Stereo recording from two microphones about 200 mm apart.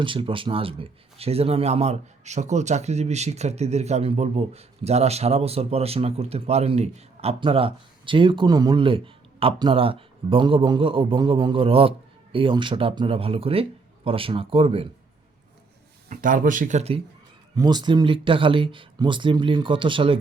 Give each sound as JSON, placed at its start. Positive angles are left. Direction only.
{"t": 0.0, "sound": "a man's voice", "side_deg": -25}
{"t": 16.0, "sound": "speech", "side_deg": -40}
{"t": 17.5, "sound": "a man's voice", "side_deg": -20}